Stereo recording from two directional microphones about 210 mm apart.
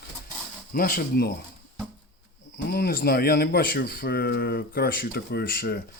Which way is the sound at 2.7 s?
50° left (ahead or behind).